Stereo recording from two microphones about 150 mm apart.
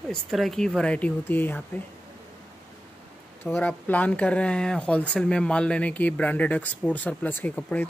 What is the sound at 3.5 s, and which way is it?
Speech, 10° left (ahead or behind).